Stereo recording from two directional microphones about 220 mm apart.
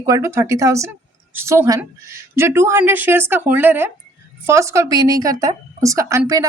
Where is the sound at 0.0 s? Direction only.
15° right (ahead or behind).